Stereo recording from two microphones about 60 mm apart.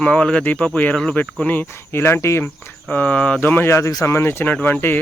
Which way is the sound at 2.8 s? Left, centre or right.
Left.